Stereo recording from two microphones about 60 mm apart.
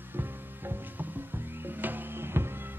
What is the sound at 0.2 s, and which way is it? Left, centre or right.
Music, right.